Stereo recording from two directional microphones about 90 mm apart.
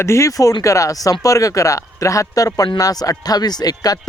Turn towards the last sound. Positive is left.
turn(degrees=45)  # may be behind; listen again after turning